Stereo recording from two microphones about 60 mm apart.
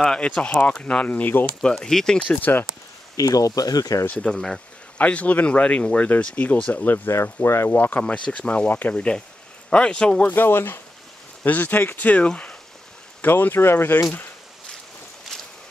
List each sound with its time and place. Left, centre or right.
0.0 s speech: centre; by 1.4 s left
1.6 s speech: centre
3.2 s speech: left
4.3 s speech: centre
4.9 s speech: left
7.2 s speech: left
7.7 s speech: left
8.0 s speech: centre
10.2 s speech: left; by 12.5 s centre
13.2 s speech: left